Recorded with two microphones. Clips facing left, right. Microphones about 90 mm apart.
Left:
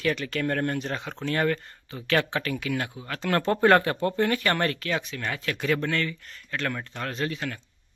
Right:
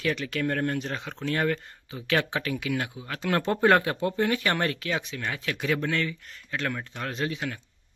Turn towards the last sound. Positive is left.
turn(degrees=-10)  # may be behind; listen again after turning